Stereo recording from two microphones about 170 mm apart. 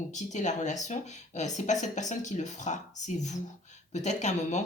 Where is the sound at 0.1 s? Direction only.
45° left (ahead or behind).